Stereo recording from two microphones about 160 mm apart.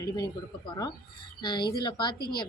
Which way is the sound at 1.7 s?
30° left (ahead or behind).